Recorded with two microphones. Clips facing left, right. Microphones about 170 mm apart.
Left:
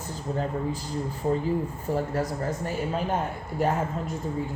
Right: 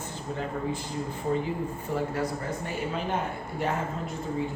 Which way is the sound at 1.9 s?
40° left (ahead or behind).